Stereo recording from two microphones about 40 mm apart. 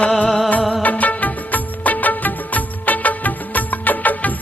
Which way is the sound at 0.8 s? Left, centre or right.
Left.